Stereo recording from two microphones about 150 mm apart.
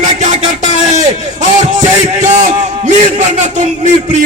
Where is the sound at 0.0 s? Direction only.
50° right (ahead or behind).